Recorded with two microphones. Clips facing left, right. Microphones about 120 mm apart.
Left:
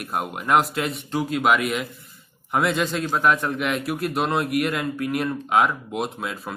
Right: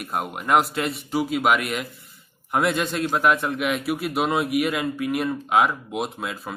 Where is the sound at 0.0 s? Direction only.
Centre (ahead or behind).